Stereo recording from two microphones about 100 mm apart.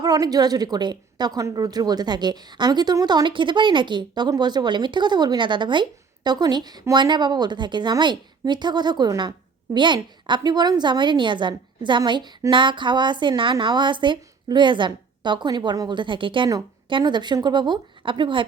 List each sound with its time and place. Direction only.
0.0 s a woman's voice: 40° right (ahead or behind)